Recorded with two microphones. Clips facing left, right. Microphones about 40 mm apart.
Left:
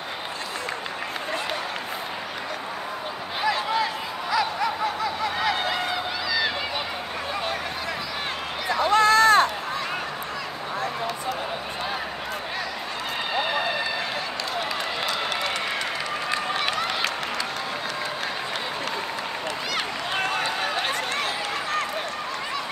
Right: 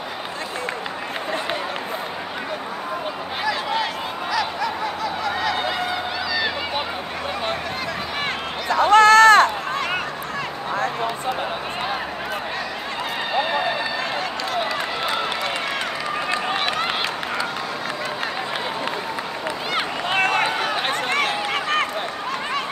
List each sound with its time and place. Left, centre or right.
8.7 s run: right
20.2 s run: right